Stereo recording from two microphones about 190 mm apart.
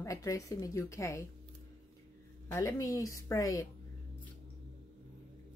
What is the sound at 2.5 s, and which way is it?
Speech, 15° left (ahead or behind).